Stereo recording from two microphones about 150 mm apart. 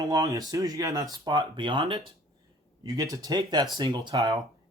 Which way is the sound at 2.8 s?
25° right (ahead or behind).